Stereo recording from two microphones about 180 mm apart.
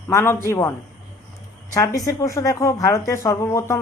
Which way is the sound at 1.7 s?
20° left (ahead or behind).